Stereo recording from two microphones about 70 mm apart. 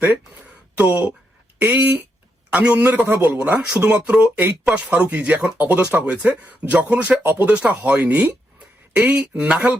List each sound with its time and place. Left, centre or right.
0.8 s speech: right